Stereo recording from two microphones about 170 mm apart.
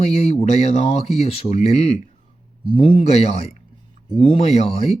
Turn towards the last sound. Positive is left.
turn(degrees=35)  # may be behind; listen again after turning